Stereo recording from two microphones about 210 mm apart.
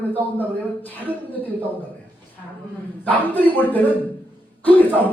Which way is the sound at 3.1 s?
10° left (ahead or behind).